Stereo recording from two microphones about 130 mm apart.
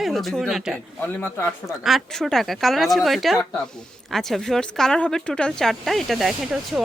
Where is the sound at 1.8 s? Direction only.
Centre (ahead or behind).